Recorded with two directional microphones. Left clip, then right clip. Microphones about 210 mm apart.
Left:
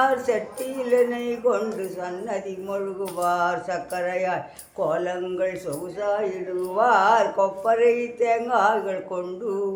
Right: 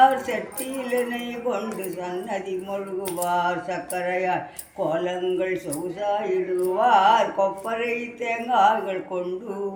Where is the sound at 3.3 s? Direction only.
15° left (ahead or behind).